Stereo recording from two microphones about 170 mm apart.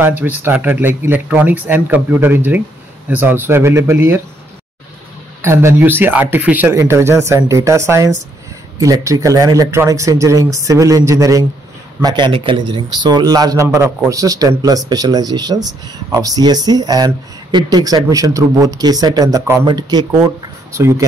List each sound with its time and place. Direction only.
0.0 s a man's voice: 10° right (ahead or behind)
5.4 s a man's voice: 15° right (ahead or behind)